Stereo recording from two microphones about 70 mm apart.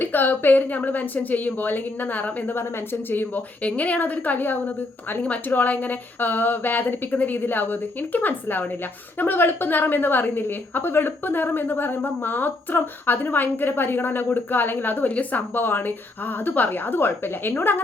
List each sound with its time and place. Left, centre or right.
0.0 s a woman's voice: left